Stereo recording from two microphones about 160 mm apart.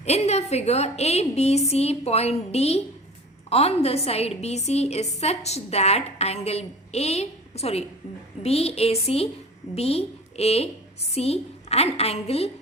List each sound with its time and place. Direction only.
0.0 s a woman's voice: 40° left (ahead or behind)